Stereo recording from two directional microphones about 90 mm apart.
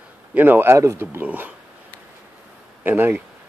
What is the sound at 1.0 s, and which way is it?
Speech, 20° right (ahead or behind).